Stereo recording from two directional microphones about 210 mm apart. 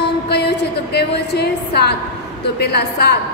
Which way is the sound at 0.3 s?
50° left (ahead or behind).